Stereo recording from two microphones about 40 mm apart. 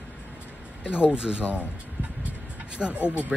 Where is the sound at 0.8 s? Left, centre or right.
Right.